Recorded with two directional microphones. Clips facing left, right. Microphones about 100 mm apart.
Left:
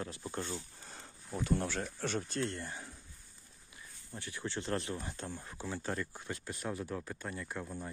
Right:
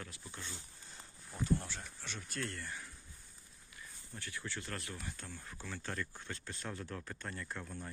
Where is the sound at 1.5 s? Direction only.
70° left (ahead or behind); by 2.2 s 55° left (ahead or behind).